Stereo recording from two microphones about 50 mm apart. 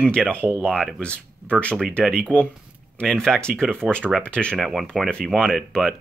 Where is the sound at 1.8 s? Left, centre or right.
Centre.